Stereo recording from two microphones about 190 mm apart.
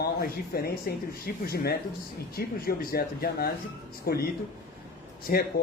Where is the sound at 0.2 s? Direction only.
55° left (ahead or behind).